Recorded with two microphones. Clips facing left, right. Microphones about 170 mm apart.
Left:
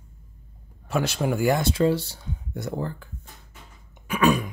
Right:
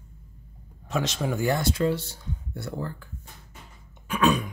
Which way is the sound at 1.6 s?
30° left (ahead or behind).